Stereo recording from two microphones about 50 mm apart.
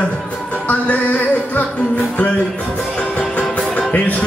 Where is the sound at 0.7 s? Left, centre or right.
Left.